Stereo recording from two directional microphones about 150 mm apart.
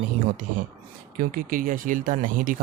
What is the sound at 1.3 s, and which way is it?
Speech, 65° right (ahead or behind).